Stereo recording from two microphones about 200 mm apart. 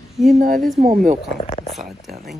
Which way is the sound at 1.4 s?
30° left (ahead or behind).